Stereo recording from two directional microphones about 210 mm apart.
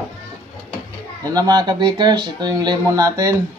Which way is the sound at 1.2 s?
20° right (ahead or behind).